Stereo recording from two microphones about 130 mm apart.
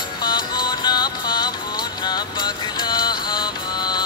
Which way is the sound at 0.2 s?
35° left (ahead or behind).